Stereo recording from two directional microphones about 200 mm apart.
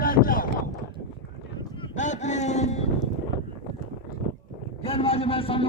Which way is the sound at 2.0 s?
35° left (ahead or behind).